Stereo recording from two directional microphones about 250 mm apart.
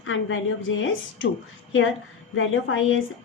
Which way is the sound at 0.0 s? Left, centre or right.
Left.